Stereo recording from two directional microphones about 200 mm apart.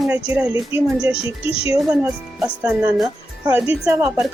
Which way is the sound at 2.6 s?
Centre (ahead or behind).